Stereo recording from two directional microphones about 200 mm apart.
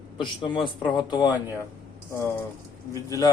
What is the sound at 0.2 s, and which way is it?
Speech, 25° left (ahead or behind).